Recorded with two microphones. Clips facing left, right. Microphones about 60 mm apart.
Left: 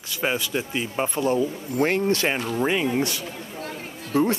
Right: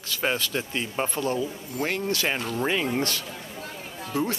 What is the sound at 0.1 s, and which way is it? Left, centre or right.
Speech, centre.